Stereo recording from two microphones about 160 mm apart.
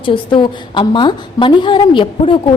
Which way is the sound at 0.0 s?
30° left (ahead or behind).